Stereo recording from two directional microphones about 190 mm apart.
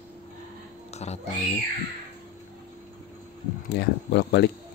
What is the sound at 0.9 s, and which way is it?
Music, 35° left (ahead or behind).